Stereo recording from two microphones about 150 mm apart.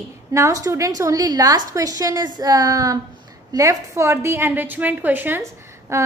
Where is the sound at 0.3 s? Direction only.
20° right (ahead or behind).